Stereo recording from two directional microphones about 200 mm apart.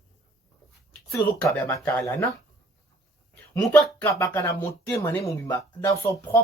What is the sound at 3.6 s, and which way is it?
Speech, 5° left (ahead or behind).